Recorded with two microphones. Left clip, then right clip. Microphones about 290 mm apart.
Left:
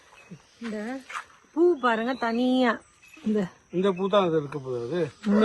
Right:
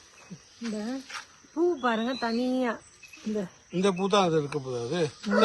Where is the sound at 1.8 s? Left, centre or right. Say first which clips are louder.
Left 3 dB; left.